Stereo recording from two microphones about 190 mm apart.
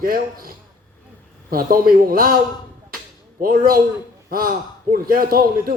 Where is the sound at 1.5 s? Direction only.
50° right (ahead or behind).